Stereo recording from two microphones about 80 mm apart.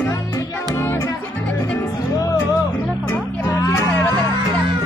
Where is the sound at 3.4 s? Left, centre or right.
Left.